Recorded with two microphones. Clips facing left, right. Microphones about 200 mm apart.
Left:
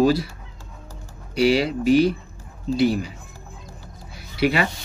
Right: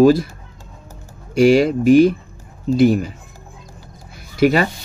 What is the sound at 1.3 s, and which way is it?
A man's voice, 50° right (ahead or behind).